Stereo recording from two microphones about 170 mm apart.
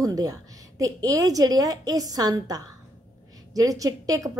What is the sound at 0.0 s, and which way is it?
A woman's voice, 20° right (ahead or behind).